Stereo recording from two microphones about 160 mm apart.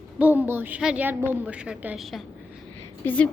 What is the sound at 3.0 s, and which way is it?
Speech, 10° left (ahead or behind).